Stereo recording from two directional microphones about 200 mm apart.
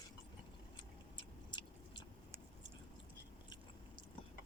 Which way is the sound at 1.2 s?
25° left (ahead or behind).